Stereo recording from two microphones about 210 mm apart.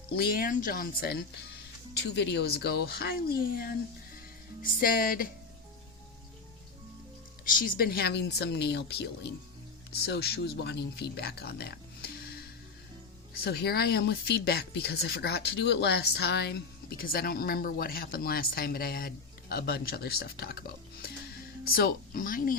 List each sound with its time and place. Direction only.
0.2 s speech: 45° left (ahead or behind)
7.4 s speech: 40° left (ahead or behind)
13.3 s speech: 50° left (ahead or behind)